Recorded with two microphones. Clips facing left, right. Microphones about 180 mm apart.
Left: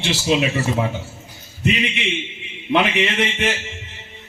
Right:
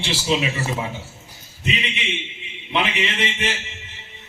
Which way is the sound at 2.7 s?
50° left (ahead or behind).